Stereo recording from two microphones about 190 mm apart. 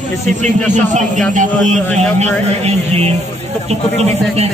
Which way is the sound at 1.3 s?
40° right (ahead or behind).